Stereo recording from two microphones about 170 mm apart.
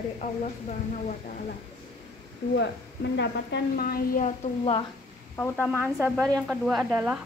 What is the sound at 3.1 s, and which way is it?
A woman's voice, 75° left (ahead or behind).